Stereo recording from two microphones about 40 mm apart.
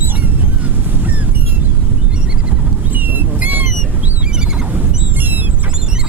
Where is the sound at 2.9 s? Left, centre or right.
Right.